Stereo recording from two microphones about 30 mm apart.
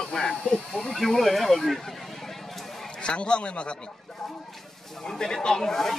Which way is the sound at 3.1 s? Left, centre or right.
Left.